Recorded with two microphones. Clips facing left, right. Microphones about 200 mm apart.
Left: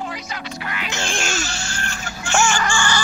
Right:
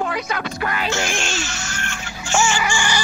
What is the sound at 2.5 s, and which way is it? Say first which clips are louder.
Chicken: even; 15° right (ahead or behind).